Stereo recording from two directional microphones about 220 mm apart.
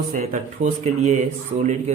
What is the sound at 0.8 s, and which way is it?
Speech, 30° right (ahead or behind).